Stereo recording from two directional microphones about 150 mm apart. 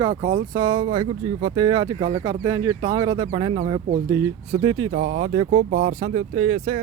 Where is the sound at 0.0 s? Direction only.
35° right (ahead or behind).